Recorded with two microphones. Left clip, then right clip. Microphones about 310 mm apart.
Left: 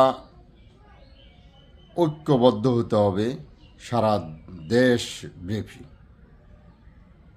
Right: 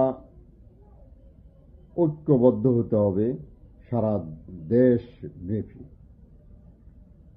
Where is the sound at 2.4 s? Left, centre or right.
Centre.